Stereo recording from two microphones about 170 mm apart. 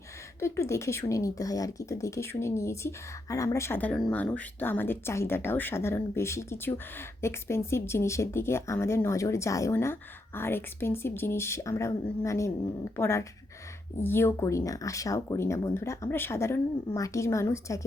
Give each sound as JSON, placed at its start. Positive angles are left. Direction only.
{"t": 0.3, "sound": "speech", "side_deg": 15}